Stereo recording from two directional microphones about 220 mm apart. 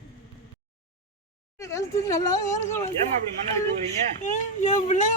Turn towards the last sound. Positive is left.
turn(degrees=35)  # may be behind; listen again after turning